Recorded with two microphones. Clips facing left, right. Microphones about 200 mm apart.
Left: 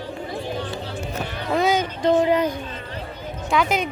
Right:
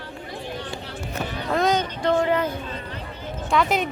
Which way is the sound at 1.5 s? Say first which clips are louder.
Left 1 dB; 5° left (ahead or behind).